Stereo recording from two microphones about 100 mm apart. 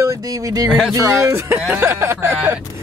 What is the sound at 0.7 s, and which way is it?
Speech, centre (ahead or behind).